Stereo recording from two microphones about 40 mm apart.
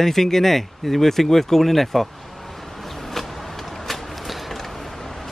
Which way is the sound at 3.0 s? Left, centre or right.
Centre.